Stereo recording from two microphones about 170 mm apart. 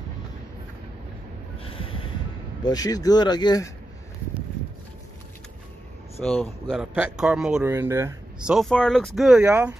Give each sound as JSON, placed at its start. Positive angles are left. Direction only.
{"t": 1.6, "sound": "train", "side_deg": 35}
{"t": 2.6, "sound": "speech", "side_deg": 20}
{"t": 6.2, "sound": "speech", "side_deg": 0}
{"t": 8.4, "sound": "speech", "side_deg": -5}